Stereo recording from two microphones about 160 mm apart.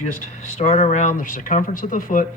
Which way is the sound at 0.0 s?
50° left (ahead or behind).